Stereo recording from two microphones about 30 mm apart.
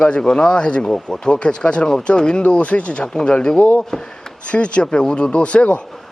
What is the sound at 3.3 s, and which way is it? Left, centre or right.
Speech, left.